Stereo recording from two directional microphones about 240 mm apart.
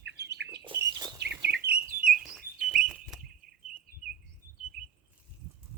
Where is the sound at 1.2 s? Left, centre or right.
Right.